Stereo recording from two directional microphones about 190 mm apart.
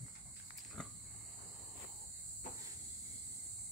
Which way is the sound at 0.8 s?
5° left (ahead or behind).